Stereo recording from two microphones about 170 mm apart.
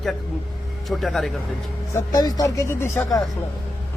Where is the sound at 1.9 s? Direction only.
20° left (ahead or behind).